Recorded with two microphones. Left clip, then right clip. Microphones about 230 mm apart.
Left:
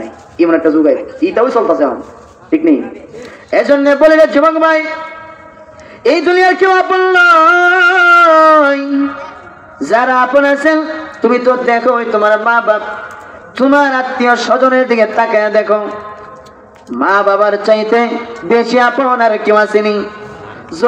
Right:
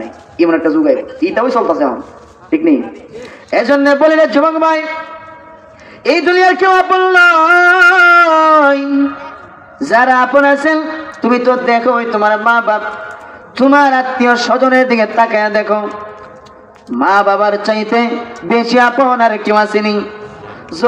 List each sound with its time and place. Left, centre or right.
0.4 s a man's voice: right
3.5 s a man's voice: right
6.0 s a man's voice: right
17.0 s a man's voice: right